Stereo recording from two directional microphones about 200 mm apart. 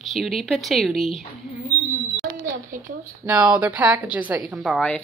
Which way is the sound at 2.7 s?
45° right (ahead or behind).